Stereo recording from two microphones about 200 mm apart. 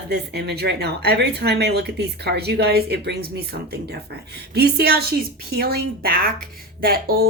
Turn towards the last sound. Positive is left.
turn(degrees=-45)  # may be behind; listen again after turning